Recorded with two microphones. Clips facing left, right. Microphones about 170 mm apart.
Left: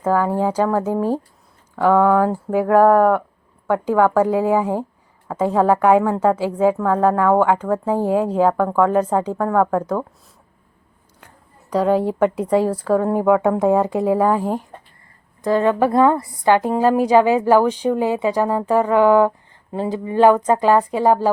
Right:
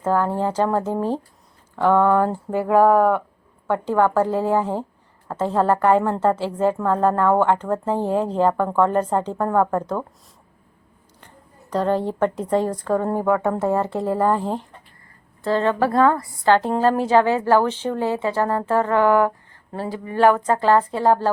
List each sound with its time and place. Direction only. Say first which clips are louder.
0.0 s a woman's voice: left 2 dB; 10° left (ahead or behind)
1.7 s a sound: left 2 dB; 5° left (ahead or behind)
3.7 s a woman's voice: left 3 dB; 10° left (ahead or behind)
11.7 s a woman's voice: left 4 dB; 10° left (ahead or behind)